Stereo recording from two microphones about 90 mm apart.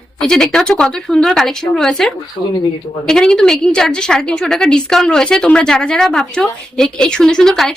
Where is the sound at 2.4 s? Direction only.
55° right (ahead or behind).